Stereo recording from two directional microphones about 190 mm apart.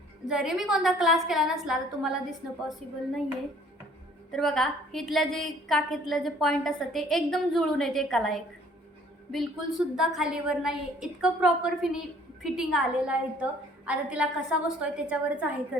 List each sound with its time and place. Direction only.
0.3 s a woman's voice: 5° right (ahead or behind)
2.8 s a woman's voice: 40° right (ahead or behind)
4.3 s a woman's voice: centre (ahead or behind)